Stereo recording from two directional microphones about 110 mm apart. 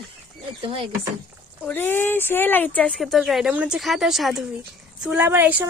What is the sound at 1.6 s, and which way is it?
Speech, 20° left (ahead or behind).